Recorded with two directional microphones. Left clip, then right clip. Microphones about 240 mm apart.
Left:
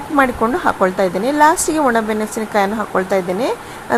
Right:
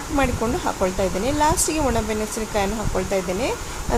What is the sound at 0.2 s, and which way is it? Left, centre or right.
Speech, centre.